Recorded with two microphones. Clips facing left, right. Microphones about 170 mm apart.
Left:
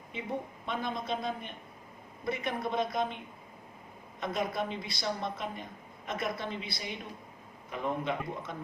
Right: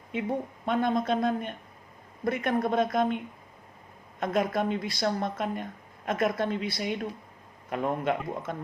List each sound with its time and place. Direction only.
0.1 s a woman's voice: 50° right (ahead or behind)
4.2 s a woman's voice: 50° right (ahead or behind)